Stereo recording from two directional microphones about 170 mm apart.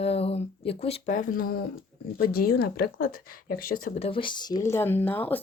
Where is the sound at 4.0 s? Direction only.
35° left (ahead or behind); by 5.4 s 10° left (ahead or behind).